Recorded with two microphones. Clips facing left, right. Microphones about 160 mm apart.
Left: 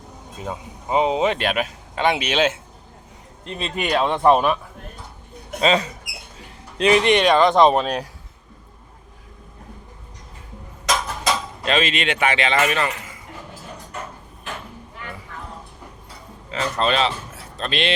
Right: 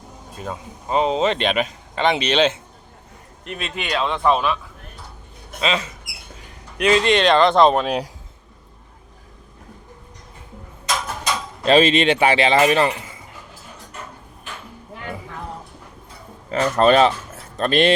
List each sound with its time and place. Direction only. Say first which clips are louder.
0.3 s speech: even; 15° left (ahead or behind)
3.4 s a man's voice: left 1 dB; 25° left (ahead or behind)
3.8 s a man's voice: left 3 dB; 45° left (ahead or behind)
5.5 s speech: left 4 dB; 35° left (ahead or behind)
6.7 s speech: left 1 dB; 20° left (ahead or behind)
7.4 s speech: even; centre (ahead or behind)
7.9 s speech: right 2 dB; 10° right (ahead or behind)
11.6 s speech: right 8 dB; 30° right (ahead or behind)
16.5 s speech: right 6 dB; 45° right (ahead or behind)